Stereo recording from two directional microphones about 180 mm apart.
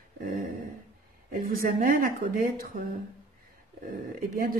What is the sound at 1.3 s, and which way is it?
Speech, 50° right (ahead or behind).